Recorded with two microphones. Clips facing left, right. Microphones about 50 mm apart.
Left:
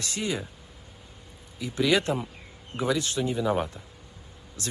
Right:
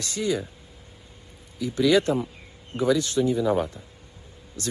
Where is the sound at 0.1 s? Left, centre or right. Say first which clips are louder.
Right 5 dB; left.